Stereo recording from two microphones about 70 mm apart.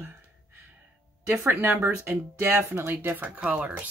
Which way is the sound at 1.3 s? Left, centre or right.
Right.